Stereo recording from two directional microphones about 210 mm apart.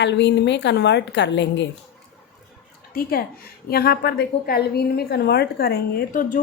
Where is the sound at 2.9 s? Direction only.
45° left (ahead or behind).